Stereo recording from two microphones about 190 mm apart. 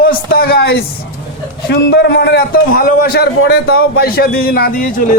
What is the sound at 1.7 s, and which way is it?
A man's voice, 60° left (ahead or behind).